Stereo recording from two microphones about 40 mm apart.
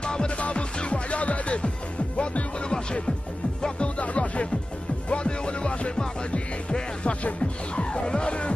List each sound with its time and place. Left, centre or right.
0.0 s music: left
0.4 s speech: left
2.1 s music: left